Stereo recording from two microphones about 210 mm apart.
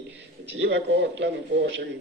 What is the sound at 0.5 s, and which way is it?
A man's voice, 60° right (ahead or behind).